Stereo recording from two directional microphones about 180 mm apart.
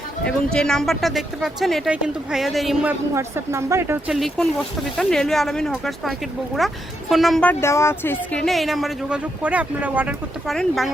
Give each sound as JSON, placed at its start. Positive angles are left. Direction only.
{"t": 0.3, "sound": "speech", "side_deg": 5}
{"t": 3.2, "sound": "speech", "side_deg": -15}
{"t": 4.1, "sound": "speech", "side_deg": 0}
{"t": 7.6, "sound": "speech", "side_deg": 15}